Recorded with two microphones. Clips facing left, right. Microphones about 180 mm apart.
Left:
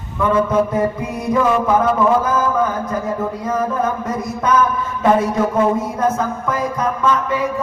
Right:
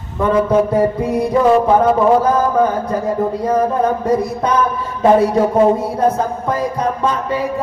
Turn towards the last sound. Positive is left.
turn(degrees=-35)  # may be behind; listen again after turning